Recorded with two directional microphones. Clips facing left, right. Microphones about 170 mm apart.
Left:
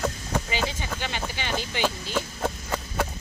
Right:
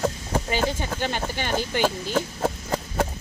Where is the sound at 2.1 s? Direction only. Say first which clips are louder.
Right 4 dB; 40° right (ahead or behind).